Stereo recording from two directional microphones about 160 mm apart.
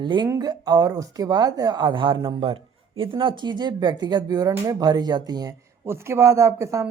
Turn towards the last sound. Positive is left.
turn(degrees=-15)  # may be behind; listen again after turning